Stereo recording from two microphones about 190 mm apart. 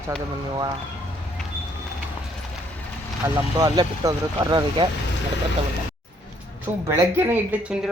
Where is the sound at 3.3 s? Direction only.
20° right (ahead or behind).